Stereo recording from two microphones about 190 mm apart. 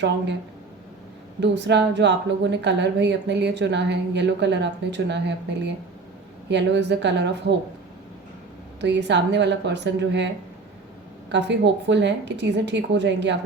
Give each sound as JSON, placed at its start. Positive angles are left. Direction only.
{"t": 1.4, "sound": "a woman's voice", "side_deg": -65}
{"t": 6.5, "sound": "a woman's voice", "side_deg": -65}
{"t": 8.8, "sound": "a woman's voice", "side_deg": -65}
{"t": 11.3, "sound": "a woman's voice", "side_deg": -65}